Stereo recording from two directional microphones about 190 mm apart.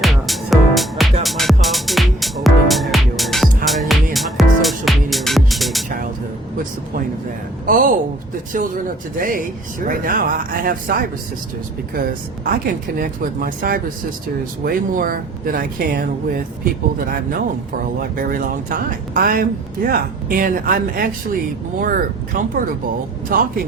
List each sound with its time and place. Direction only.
0.0 s music: centre (ahead or behind)
7.7 s a sound: 45° right (ahead or behind)
8.5 s speech: 45° right (ahead or behind)
18.2 s speech: 45° right (ahead or behind)